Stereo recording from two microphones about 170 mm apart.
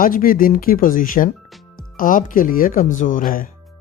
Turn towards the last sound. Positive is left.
turn(degrees=55)  # may be behind; listen again after turning